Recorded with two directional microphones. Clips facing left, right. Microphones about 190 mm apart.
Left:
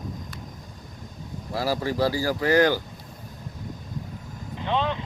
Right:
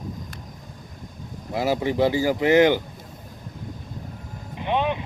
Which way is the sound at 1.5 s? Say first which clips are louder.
Right 3 dB; 20° right (ahead or behind).